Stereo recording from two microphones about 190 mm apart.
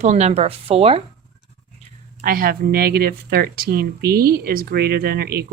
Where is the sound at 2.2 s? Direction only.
50° right (ahead or behind).